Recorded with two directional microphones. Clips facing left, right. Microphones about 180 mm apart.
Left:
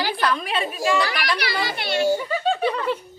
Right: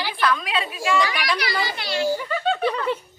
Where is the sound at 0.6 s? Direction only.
40° left (ahead or behind).